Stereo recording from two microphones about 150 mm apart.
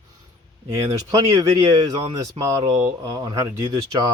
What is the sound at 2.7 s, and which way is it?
Speech, 20° right (ahead or behind).